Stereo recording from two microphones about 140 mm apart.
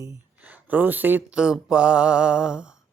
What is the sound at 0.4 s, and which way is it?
Speech, 10° right (ahead or behind).